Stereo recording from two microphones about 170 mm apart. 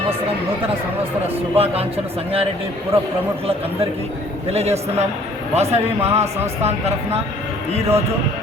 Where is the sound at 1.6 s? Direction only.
35° right (ahead or behind).